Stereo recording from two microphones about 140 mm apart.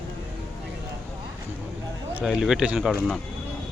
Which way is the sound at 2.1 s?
5° right (ahead or behind).